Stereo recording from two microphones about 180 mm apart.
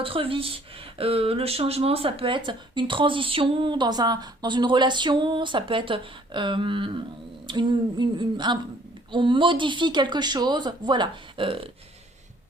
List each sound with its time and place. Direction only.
0.0 s speech: 30° right (ahead or behind)